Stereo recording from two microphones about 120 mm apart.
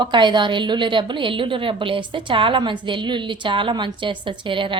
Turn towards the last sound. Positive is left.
turn(degrees=-45)  # may be behind; listen again after turning